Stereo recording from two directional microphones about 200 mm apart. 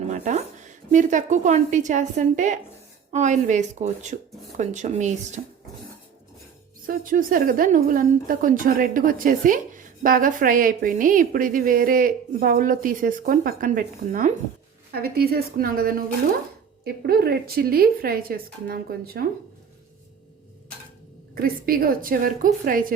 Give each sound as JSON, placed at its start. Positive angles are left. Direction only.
{"t": 0.1, "sound": "a woman's voice", "side_deg": -35}
{"t": 6.8, "sound": "a woman's voice", "side_deg": -45}
{"t": 21.3, "sound": "a woman's voice", "side_deg": -50}